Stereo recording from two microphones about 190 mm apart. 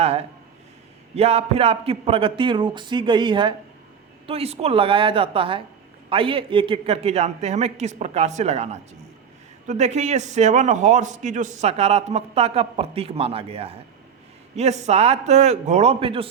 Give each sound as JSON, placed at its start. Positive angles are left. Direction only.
{"t": 0.0, "sound": "a man's voice", "side_deg": -35}